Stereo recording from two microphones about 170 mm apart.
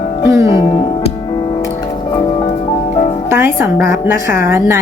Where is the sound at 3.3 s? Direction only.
10° right (ahead or behind).